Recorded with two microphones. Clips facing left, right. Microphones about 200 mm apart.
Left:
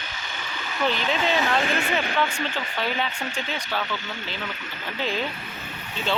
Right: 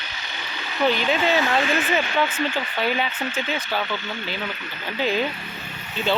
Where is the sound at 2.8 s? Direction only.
5° right (ahead or behind).